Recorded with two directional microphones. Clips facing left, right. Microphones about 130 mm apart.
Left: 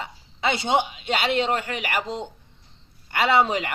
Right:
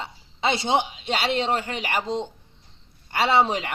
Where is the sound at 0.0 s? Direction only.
30° right (ahead or behind).